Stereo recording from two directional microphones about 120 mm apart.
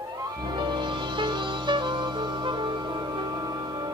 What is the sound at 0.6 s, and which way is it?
Music, 40° right (ahead or behind).